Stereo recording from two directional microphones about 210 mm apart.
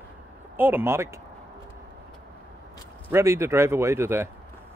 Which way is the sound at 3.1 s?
15° right (ahead or behind).